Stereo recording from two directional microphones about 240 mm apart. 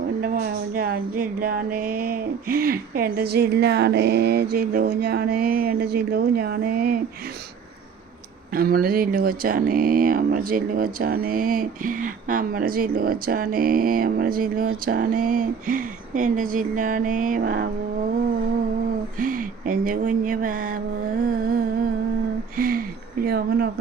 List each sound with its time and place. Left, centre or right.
0.2 s speech: right
8.5 s speech: right
19.2 s speech: right
22.5 s a sound: right
23.2 s speech: right